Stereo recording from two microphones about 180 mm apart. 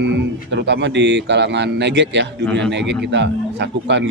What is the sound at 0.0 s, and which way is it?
Speech, 75° right (ahead or behind).